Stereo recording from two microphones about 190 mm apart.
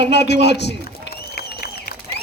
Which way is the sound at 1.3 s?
55° left (ahead or behind).